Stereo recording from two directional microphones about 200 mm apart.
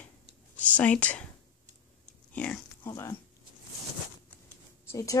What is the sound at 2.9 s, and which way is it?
Speech, 15° left (ahead or behind).